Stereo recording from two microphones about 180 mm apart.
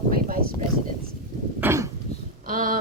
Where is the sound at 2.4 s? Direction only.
50° right (ahead or behind).